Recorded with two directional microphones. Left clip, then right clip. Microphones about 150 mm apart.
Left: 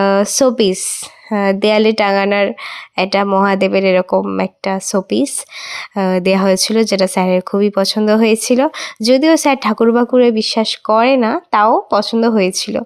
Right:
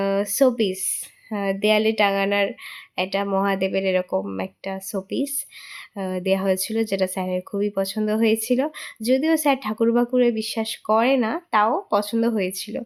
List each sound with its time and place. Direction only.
0.0 s speech: 30° left (ahead or behind)